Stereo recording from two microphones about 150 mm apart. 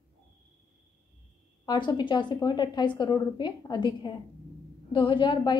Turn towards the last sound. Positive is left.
turn(degrees=30)  # may be behind; listen again after turning